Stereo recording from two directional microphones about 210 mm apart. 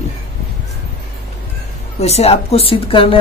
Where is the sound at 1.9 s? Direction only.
30° left (ahead or behind).